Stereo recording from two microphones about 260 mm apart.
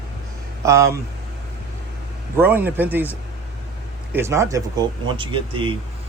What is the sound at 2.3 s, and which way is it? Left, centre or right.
Speech, centre.